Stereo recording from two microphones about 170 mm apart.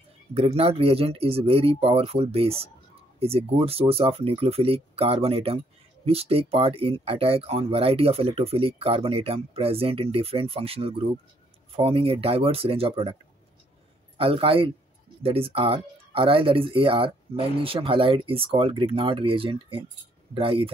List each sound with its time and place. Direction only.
0.3 s speech: 35° right (ahead or behind)
14.1 s speech: 35° right (ahead or behind)